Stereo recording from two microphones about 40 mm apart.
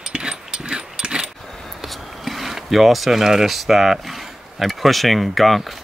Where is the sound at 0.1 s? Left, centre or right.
Right.